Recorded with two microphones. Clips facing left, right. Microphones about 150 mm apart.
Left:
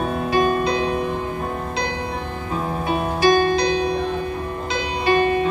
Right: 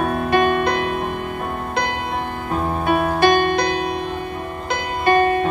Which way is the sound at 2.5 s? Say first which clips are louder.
Right 3 dB; 60° right (ahead or behind).